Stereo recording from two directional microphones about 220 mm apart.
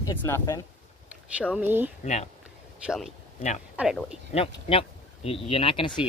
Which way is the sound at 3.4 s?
30° left (ahead or behind).